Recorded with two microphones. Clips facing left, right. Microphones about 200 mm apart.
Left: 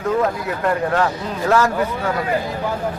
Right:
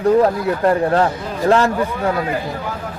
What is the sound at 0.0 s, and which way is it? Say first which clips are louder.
Speech: right 6 dB; 35° right (ahead or behind).